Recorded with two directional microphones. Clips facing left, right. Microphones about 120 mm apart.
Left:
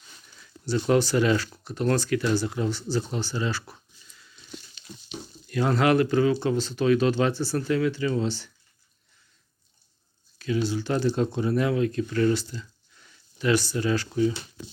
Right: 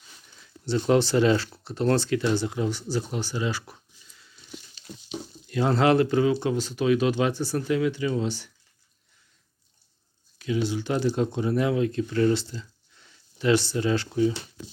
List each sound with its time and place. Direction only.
0.6 s speech: 25° right (ahead or behind)
4.9 s a sound: 65° right (ahead or behind)
5.5 s speech: 25° right (ahead or behind)
10.3 s speech: 15° right (ahead or behind)